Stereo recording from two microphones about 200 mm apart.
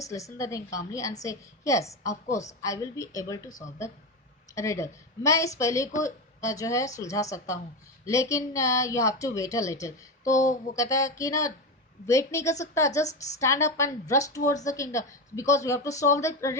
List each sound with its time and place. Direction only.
0.0 s a woman's voice: 15° left (ahead or behind)
4.5 s a woman's voice: 15° left (ahead or behind)
10.2 s speech: 40° left (ahead or behind)
10.8 s a woman's voice: 15° left (ahead or behind)